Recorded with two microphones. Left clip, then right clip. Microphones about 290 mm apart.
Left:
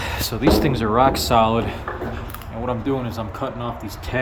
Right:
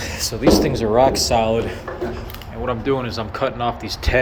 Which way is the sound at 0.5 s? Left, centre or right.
Centre.